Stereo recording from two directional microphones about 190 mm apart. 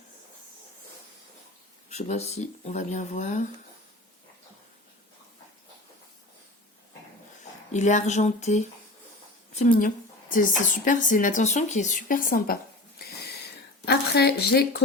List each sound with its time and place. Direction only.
1.9 s speech: 35° left (ahead or behind)
7.7 s speech: 40° left (ahead or behind)
13.0 s a sound: 55° left (ahead or behind)